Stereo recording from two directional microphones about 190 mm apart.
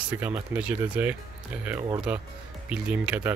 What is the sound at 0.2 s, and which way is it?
Speech, 10° right (ahead or behind).